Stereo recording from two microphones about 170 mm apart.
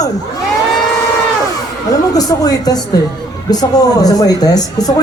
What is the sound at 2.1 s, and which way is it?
A woman's voice, 20° left (ahead or behind).